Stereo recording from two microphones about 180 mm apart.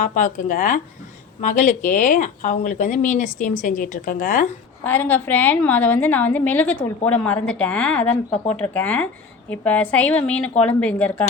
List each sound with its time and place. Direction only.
0.0 s speech: 45° left (ahead or behind)
4.8 s a woman's voice: 10° left (ahead or behind)